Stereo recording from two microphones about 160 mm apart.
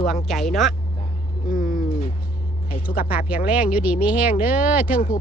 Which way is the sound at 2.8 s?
60° left (ahead or behind).